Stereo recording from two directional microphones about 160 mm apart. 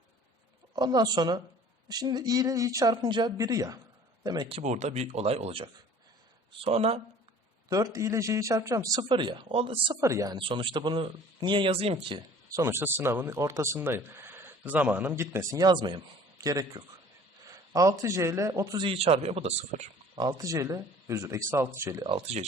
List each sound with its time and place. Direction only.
0.8 s speech: 25° right (ahead or behind)
4.4 s a man's voice: 45° right (ahead or behind)
7.7 s speech: 20° right (ahead or behind); by 9.8 s 35° right (ahead or behind)
9.9 s speech: 20° right (ahead or behind)
10.3 s a man's voice: 30° right (ahead or behind)
12.5 s a man's voice: 20° right (ahead or behind)
18.9 s a man's voice: 35° right (ahead or behind)
20.1 s speech: 25° right (ahead or behind)